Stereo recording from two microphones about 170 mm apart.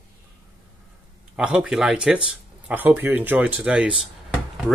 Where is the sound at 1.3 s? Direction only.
5° right (ahead or behind).